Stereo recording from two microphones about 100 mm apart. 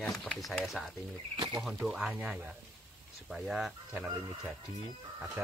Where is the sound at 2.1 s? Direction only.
15° right (ahead or behind).